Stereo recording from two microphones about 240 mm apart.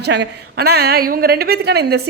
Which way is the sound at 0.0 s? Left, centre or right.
Right.